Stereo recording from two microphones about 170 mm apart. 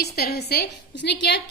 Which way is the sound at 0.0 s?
70° left (ahead or behind).